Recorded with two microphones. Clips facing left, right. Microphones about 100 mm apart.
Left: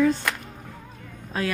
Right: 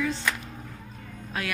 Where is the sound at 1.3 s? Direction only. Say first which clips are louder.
Left 5 dB; 35° left (ahead or behind).